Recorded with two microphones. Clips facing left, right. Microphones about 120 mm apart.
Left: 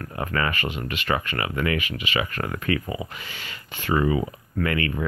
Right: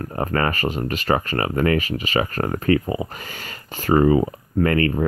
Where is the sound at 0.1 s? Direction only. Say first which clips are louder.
Right 4 dB; 40° right (ahead or behind).